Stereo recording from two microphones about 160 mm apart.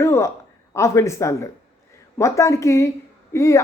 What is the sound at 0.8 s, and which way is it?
Speech, 20° left (ahead or behind).